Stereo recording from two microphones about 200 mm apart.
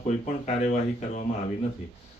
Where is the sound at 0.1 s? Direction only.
35° left (ahead or behind).